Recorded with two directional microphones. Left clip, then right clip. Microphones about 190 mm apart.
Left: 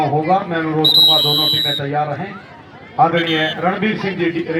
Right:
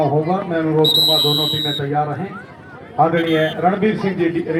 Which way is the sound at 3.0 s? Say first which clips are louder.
Left 2 dB; 30° left (ahead or behind).